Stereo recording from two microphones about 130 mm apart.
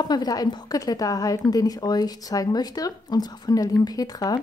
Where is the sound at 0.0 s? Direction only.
30° left (ahead or behind).